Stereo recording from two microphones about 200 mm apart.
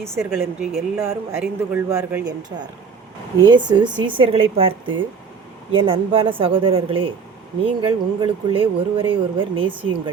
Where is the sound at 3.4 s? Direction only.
20° right (ahead or behind).